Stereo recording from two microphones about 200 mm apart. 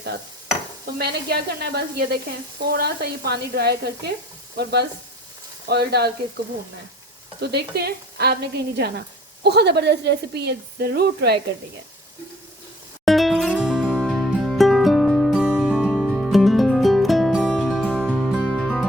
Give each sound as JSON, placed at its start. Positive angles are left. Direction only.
{"t": 0.9, "sound": "speech", "side_deg": -55}
{"t": 7.4, "sound": "speech", "side_deg": -50}
{"t": 13.1, "sound": "music", "side_deg": 0}